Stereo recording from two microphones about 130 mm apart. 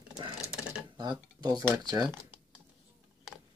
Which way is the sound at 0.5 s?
5° right (ahead or behind).